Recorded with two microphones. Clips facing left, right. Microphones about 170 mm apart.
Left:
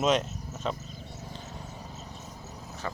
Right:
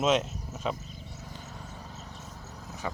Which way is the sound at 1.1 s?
20° left (ahead or behind).